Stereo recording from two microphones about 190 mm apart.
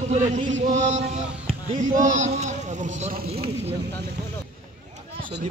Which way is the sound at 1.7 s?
40° right (ahead or behind).